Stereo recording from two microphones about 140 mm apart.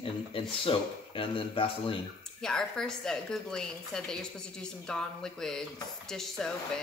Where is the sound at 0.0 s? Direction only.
40° left (ahead or behind).